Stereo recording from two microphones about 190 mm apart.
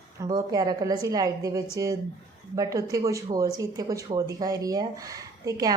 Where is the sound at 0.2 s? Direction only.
20° right (ahead or behind).